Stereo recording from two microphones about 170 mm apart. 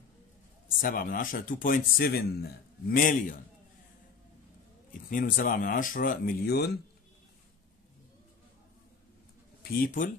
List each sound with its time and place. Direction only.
0.7 s speech: 55° left (ahead or behind)
5.1 s speech: 50° left (ahead or behind); by 6.7 s 70° left (ahead or behind)
9.6 s speech: 55° left (ahead or behind)